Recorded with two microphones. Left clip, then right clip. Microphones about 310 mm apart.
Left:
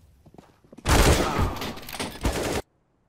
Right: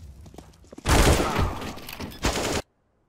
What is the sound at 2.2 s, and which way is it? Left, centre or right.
Fusillade, right.